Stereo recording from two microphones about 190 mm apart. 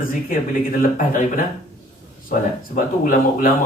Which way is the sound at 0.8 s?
45° left (ahead or behind).